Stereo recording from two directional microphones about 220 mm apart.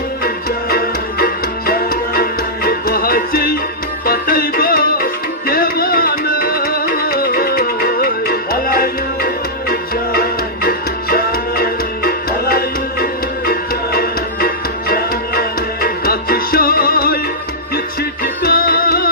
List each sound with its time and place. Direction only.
0.2 s music: 45° left (ahead or behind)
18.2 s music: 45° left (ahead or behind)